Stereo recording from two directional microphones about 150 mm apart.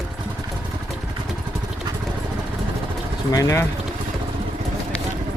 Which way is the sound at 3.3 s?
20° left (ahead or behind).